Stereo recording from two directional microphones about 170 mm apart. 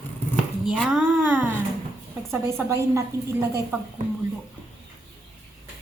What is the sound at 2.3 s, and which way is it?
A woman's voice, 15° right (ahead or behind).